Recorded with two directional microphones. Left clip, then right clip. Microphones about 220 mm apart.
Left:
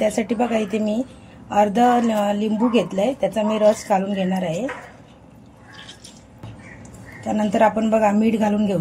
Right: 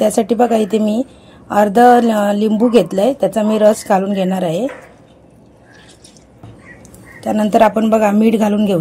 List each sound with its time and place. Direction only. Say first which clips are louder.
0.0 s a woman's voice: right 8 dB; 35° right (ahead or behind)
7.2 s a woman's voice: right 6 dB; 40° right (ahead or behind)